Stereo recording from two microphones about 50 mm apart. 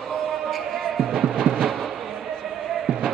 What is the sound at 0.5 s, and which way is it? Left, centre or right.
Music, centre.